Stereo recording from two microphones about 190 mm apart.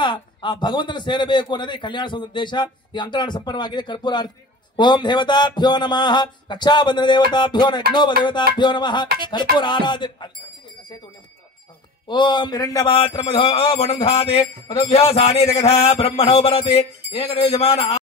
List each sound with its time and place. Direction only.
0.0 s a man's voice: 25° left (ahead or behind)
12.1 s a man's voice: 25° left (ahead or behind)
12.9 s a sound: 30° left (ahead or behind)